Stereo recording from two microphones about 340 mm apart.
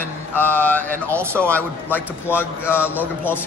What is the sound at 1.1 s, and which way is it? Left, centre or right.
Speech, centre.